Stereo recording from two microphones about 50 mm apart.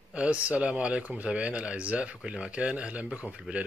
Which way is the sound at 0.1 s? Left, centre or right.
Right.